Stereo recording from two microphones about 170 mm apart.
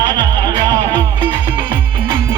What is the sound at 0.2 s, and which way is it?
Music, 25° right (ahead or behind).